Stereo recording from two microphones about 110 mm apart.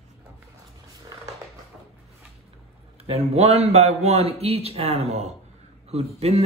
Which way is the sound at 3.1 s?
70° right (ahead or behind).